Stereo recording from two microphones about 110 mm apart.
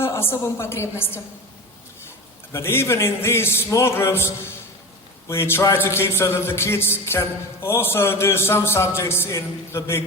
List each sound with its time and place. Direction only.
0.0 s a woman's voice: 20° left (ahead or behind)
2.5 s speech: 25° left (ahead or behind)